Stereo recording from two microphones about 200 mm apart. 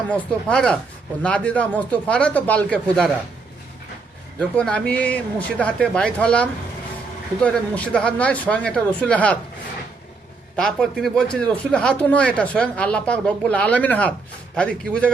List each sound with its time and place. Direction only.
0.1 s speech: 5° left (ahead or behind)
4.4 s speech: 5° left (ahead or behind)
10.6 s speech: 5° left (ahead or behind)